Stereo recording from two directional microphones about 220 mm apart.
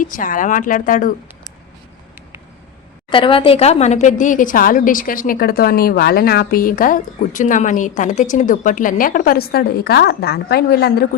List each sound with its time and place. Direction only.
0.0 s speech: 35° left (ahead or behind)
3.1 s speech: 25° left (ahead or behind); by 11.0 s 45° left (ahead or behind)